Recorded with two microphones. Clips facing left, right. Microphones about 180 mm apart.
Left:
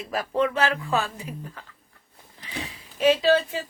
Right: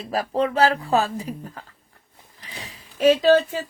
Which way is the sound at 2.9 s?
45° right (ahead or behind).